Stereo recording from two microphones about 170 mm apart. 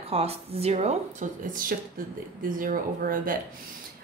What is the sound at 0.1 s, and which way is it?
A woman's voice, 35° right (ahead or behind).